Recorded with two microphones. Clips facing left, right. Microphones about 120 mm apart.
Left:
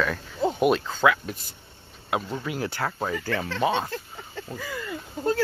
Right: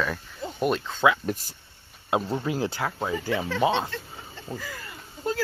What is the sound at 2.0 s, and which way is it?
Speech, 25° right (ahead or behind).